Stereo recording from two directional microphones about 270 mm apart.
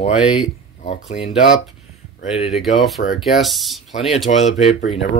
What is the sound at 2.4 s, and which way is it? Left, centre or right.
Speech, centre.